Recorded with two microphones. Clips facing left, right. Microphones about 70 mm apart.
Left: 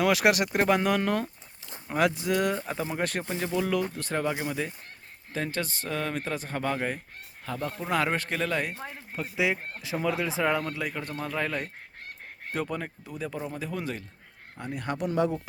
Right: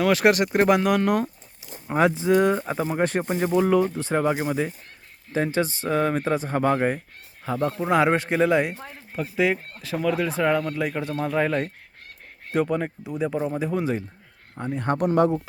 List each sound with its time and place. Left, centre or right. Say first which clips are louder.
0.0 s speech: right 4 dB; centre
1.9 s speech: right 6 dB; right
3.9 s speech: right 7 dB; centre
5.3 s speech: right 8 dB; centre
7.4 s speech: right 8 dB; centre
8.8 s speech: right 4 dB; centre
11.2 s speech: right 8 dB; centre
14.5 s speech: right 7 dB; right
14.9 s speech: right 7 dB; right